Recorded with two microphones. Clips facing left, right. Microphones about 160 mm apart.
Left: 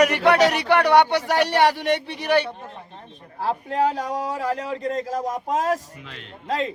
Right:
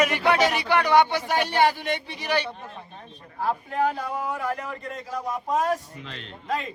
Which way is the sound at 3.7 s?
90° left.